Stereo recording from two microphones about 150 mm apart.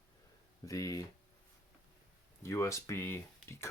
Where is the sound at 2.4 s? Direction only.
20° left (ahead or behind).